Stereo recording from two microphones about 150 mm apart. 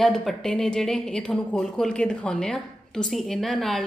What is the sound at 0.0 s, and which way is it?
A woman's voice, centre (ahead or behind).